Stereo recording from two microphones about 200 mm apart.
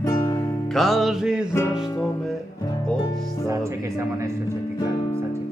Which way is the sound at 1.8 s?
15° left (ahead or behind).